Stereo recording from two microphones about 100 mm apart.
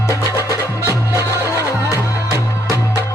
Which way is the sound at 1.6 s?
30° right (ahead or behind).